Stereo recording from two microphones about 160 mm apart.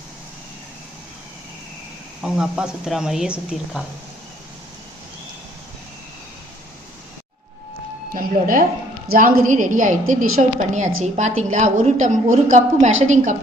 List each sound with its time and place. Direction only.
2.2 s speech: 5° right (ahead or behind)
8.1 s a woman's voice: 60° right (ahead or behind)